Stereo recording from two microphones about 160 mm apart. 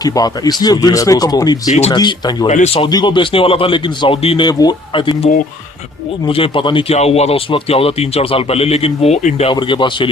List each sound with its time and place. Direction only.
0.0 s speech: 25° left (ahead or behind)
2.5 s speech: 50° left (ahead or behind)
2.8 s speech: 30° left (ahead or behind); by 9.5 s 45° left (ahead or behind)
9.5 s speech: 30° left (ahead or behind)